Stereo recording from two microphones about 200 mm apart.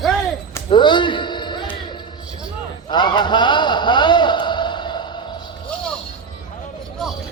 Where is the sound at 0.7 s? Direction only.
25° left (ahead or behind).